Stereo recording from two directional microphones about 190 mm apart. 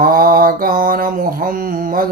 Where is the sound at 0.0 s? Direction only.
50° right (ahead or behind).